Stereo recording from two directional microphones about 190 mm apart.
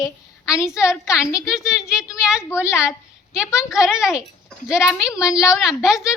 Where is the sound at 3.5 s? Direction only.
5° right (ahead or behind).